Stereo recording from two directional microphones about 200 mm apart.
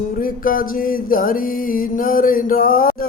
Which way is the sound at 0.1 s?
45° left (ahead or behind).